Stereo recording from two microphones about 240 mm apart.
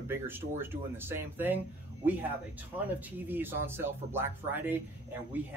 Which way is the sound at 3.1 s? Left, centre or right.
Centre.